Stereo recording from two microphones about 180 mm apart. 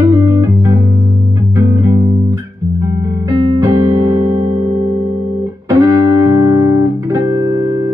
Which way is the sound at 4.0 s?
20° right (ahead or behind).